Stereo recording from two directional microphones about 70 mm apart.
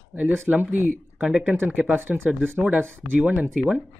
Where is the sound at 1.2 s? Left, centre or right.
Centre.